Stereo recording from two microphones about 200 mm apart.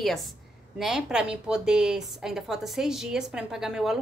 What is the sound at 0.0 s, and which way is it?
A woman's voice, centre (ahead or behind).